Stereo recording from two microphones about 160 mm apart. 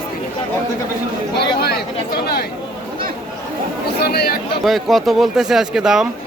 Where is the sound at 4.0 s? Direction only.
80° left.